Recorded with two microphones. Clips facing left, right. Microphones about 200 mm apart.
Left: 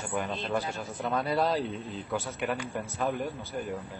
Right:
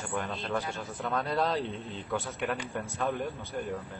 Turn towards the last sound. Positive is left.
turn(degrees=5)  # may be behind; listen again after turning